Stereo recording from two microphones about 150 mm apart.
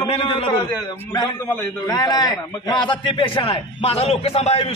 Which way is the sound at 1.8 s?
25° left (ahead or behind).